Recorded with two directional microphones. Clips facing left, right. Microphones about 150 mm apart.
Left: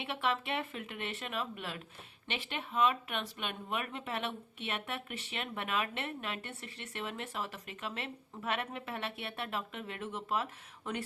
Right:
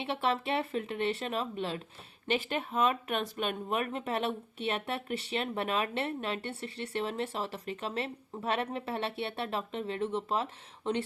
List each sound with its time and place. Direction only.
0.0 s speech: 35° right (ahead or behind)
2.2 s speech: 40° right (ahead or behind)